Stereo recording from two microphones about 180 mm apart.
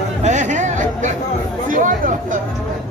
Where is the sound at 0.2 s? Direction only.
40° right (ahead or behind).